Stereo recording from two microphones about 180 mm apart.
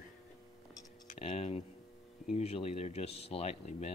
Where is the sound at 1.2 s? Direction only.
35° left (ahead or behind).